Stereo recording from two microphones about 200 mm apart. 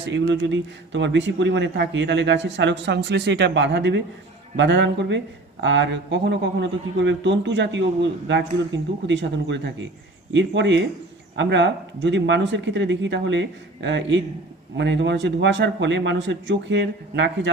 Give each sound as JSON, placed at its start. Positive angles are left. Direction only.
{"t": 0.0, "sound": "speech", "side_deg": -65}